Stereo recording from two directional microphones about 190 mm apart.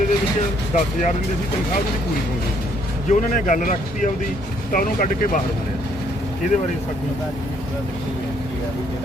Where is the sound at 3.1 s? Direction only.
40° left (ahead or behind).